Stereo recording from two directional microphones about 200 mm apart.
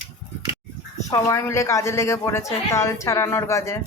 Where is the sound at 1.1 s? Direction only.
15° left (ahead or behind).